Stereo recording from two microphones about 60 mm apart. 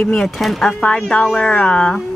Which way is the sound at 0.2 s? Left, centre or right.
Centre.